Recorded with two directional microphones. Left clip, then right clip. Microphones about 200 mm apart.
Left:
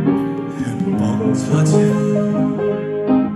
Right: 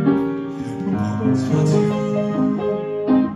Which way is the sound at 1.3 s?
30° left (ahead or behind).